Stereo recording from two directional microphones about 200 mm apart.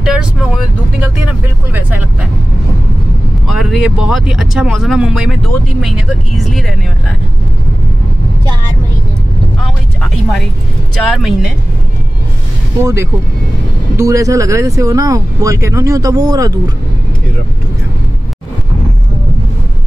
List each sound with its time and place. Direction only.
0.0 s speech: 5° right (ahead or behind)
1.7 s speech: 10° right (ahead or behind)
3.4 s speech: centre (ahead or behind)
9.6 s vehicle: centre (ahead or behind)
11.1 s speech: centre (ahead or behind)
12.8 s speech: 15° right (ahead or behind)